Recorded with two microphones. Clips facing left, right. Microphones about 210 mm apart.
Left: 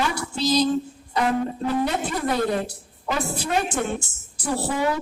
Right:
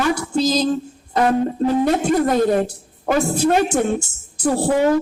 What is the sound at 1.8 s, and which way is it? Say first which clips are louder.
A woman's voice: right 8 dB; 45° right (ahead or behind).